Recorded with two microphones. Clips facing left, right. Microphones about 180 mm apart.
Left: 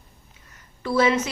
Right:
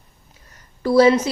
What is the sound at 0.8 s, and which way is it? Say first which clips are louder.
Speech: right 7 dB; 35° right (ahead or behind).